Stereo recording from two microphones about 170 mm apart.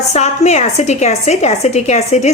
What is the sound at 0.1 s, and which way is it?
A woman's voice, 40° left (ahead or behind).